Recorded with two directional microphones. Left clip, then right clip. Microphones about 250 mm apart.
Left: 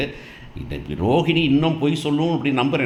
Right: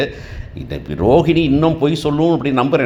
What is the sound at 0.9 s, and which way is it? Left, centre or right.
A man's voice, right.